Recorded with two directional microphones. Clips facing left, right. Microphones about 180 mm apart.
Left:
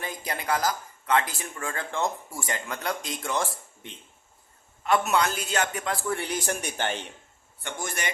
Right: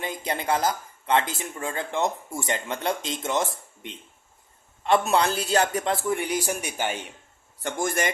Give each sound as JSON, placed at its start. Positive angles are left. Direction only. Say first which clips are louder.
{"t": 0.0, "sound": "speech", "louder": "right 4 dB", "side_deg": -20}
{"t": 7.6, "sound": "a man's voice", "louder": "right 7 dB", "side_deg": -50}